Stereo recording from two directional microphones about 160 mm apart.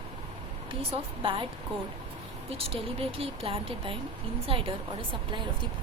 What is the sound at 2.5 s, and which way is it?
Speech, 35° right (ahead or behind).